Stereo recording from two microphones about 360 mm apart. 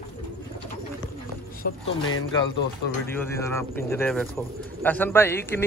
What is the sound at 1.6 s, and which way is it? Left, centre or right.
Speech, left.